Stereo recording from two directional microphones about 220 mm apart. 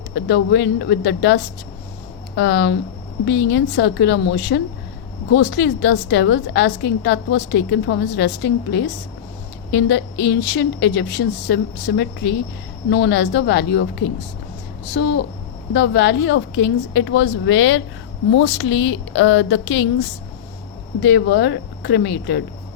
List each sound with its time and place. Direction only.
0.1 s a woman's voice: 55° left (ahead or behind)
21.0 s a woman's voice: 50° left (ahead or behind)